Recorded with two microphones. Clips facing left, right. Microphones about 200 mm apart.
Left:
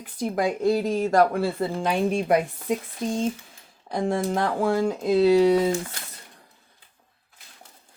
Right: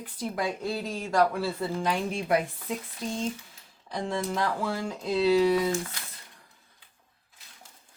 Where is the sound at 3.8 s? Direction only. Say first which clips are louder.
Left 6 dB; 50° left (ahead or behind).